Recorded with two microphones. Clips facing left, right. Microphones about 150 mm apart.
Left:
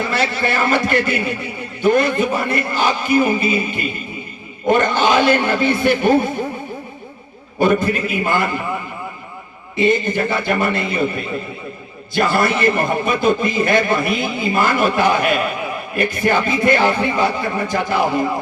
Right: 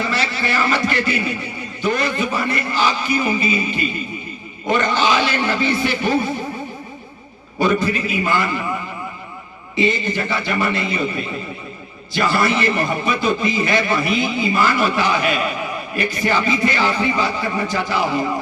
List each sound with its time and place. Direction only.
0.0 s a man's voice: 50° left (ahead or behind)
7.6 s a man's voice: 50° left (ahead or behind)
9.7 s a man's voice: 50° left (ahead or behind)